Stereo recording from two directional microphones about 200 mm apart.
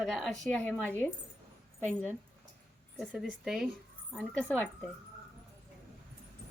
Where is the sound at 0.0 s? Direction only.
Centre (ahead or behind).